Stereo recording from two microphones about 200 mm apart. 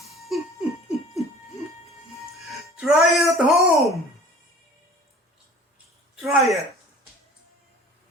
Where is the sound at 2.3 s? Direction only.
5° right (ahead or behind).